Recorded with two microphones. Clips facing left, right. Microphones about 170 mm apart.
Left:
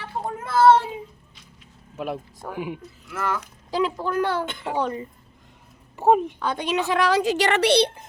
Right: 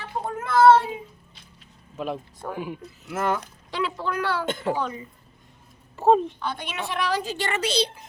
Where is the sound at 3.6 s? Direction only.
40° left (ahead or behind).